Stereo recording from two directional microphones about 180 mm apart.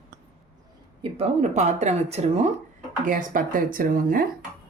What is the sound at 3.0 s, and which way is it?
Speech, 45° right (ahead or behind).